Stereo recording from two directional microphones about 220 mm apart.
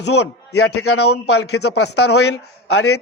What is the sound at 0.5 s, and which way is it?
A man's voice, 80° left.